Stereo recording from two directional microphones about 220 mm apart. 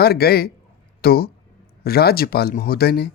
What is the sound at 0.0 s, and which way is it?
Speech, 45° left (ahead or behind).